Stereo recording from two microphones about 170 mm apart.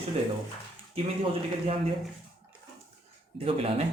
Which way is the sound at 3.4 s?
35° right (ahead or behind).